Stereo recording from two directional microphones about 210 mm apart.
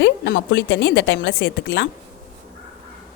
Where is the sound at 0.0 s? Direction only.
55° left (ahead or behind).